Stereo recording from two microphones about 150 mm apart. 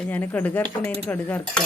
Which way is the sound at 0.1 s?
10° left (ahead or behind).